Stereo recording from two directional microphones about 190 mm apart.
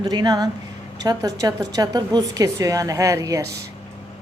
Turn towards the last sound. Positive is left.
turn(degrees=-15)  # may be behind; listen again after turning